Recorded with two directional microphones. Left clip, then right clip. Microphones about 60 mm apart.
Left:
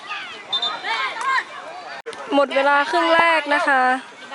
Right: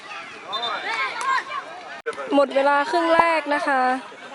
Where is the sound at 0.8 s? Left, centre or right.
Centre.